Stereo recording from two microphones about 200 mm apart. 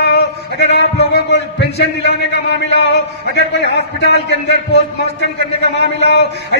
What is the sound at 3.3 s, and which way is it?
Speech, 55° left (ahead or behind).